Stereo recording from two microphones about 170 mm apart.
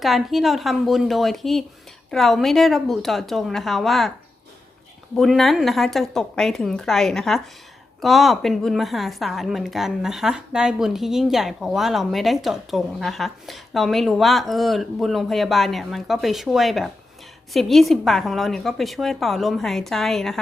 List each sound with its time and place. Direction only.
0.0 s a woman's voice: centre (ahead or behind)
5.1 s a woman's voice: centre (ahead or behind)